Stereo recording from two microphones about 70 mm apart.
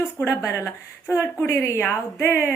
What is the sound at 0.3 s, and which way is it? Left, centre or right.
Speech, left.